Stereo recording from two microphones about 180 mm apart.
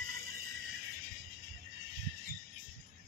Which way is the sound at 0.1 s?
55° right (ahead or behind).